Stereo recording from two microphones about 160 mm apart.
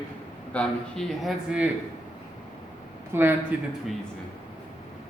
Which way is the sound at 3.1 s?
15° right (ahead or behind).